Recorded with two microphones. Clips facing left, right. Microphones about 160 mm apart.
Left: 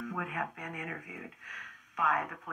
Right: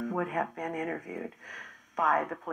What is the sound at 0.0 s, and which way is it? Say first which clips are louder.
Speech: right 6 dB; 40° right (ahead or behind).